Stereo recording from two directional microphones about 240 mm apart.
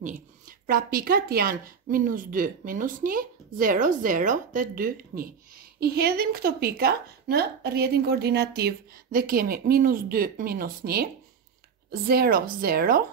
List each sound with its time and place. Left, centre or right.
0.0 s a woman's voice: right